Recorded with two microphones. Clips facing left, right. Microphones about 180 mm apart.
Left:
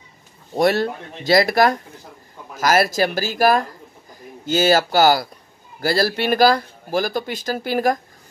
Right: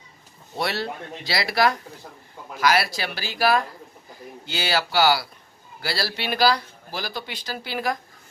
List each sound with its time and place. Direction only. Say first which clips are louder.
0.6 s speech: left 9 dB; 45° left (ahead or behind)